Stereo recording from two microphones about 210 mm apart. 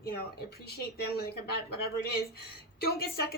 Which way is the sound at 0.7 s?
50° left (ahead or behind).